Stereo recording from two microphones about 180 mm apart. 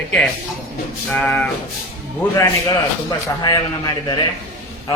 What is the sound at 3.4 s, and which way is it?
Speech, 20° left (ahead or behind).